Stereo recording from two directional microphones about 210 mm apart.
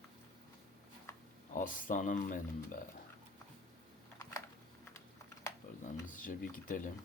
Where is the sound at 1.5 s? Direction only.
40° left (ahead or behind).